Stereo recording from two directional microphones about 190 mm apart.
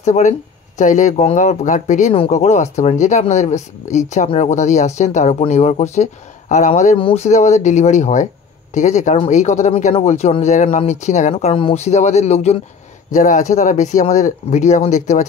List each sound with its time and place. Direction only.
0.0 s speech: 40° left (ahead or behind)